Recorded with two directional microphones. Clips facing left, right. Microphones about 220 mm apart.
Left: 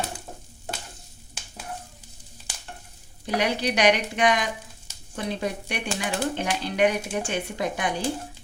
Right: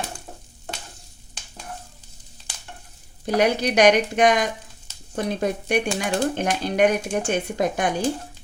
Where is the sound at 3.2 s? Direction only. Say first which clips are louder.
Right 5 dB; 45° right (ahead or behind).